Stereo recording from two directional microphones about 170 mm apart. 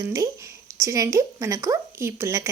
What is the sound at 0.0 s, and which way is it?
Speech, 20° right (ahead or behind).